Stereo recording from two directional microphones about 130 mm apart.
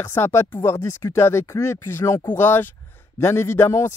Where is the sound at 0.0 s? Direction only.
20° left (ahead or behind).